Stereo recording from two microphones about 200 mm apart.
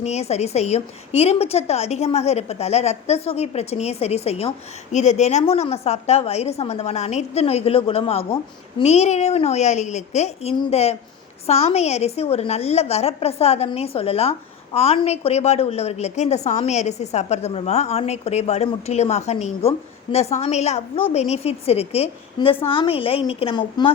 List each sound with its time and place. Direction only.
0.0 s a woman's voice: 35° left (ahead or behind)